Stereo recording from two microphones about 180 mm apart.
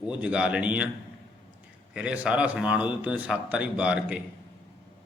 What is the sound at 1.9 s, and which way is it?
A man's voice, 5° right (ahead or behind).